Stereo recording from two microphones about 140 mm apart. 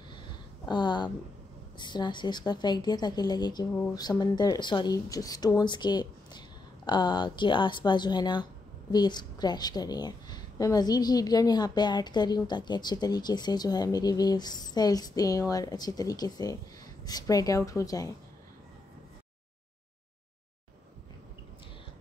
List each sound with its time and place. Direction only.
0.7 s a woman's voice: 30° left (ahead or behind)